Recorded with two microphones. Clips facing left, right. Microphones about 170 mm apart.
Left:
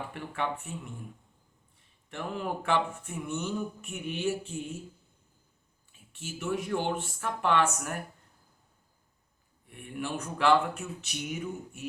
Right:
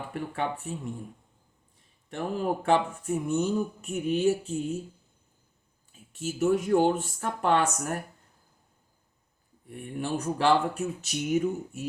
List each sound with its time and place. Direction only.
0.1 s speech: 35° right (ahead or behind)
2.0 s speech: 35° right (ahead or behind)
5.9 s speech: 40° right (ahead or behind)
9.6 s speech: 35° right (ahead or behind)